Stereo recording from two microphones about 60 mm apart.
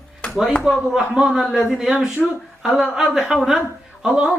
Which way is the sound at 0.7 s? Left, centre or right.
Centre.